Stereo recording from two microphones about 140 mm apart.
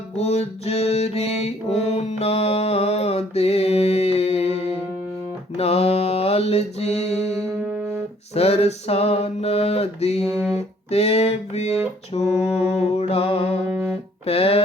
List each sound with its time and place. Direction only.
0.2 s music: 50° left (ahead or behind)
5.5 s mantra: 50° left (ahead or behind)
8.4 s mantra: 50° left (ahead or behind)
10.2 s music: 20° right (ahead or behind)
10.9 s mantra: 50° left (ahead or behind)
12.8 s music: 50° left (ahead or behind)
13.7 s music: 15° right (ahead or behind)
14.3 s music: 45° left (ahead or behind)